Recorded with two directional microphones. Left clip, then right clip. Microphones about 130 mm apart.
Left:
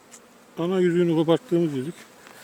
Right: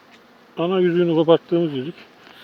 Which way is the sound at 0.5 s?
20° left (ahead or behind).